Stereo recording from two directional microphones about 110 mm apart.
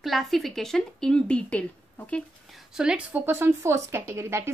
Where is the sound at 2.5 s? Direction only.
5° right (ahead or behind).